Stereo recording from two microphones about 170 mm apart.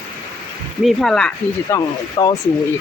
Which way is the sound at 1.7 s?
15° left (ahead or behind).